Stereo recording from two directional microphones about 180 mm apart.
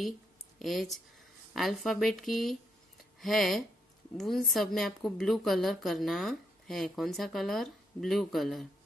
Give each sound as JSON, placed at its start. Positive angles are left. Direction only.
{"t": 0.6, "sound": "speech", "side_deg": 0}